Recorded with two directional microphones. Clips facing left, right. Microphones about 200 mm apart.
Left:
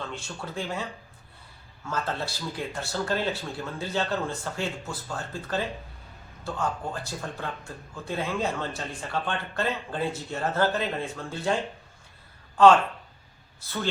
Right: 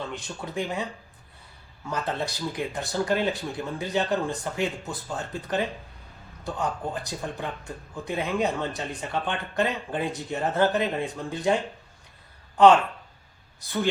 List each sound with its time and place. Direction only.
0.1 s speech: 15° right (ahead or behind)
1.9 s speech: 15° right (ahead or behind)
13.6 s speech: 15° right (ahead or behind)